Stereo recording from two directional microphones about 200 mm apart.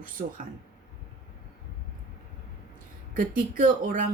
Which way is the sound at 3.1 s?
45° right (ahead or behind).